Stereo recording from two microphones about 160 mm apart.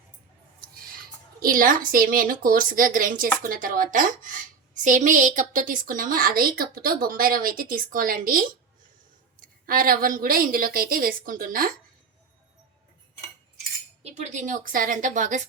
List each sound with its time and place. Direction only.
1.4 s a woman's voice: 60° right (ahead or behind)
14.0 s a woman's voice: 45° right (ahead or behind)